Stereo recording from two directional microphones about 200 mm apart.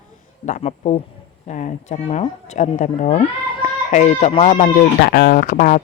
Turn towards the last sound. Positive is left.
turn(degrees=40)  # may be behind; listen again after turning